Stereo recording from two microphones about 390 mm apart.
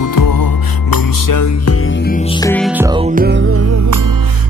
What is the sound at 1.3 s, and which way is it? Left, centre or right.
Music, left.